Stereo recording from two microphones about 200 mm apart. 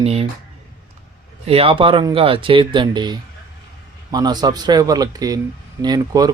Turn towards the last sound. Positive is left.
turn(degrees=-20)  # may be behind; listen again after turning